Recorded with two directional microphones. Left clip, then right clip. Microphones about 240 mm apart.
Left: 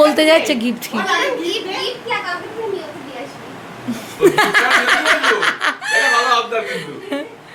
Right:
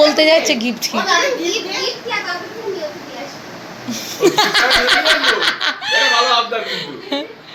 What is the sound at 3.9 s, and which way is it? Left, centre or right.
Laughter, centre.